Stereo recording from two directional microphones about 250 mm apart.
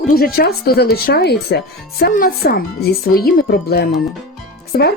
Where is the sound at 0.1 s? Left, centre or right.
Left.